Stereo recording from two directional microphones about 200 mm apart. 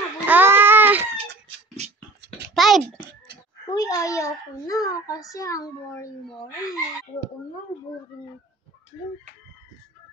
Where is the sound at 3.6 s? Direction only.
15° left (ahead or behind).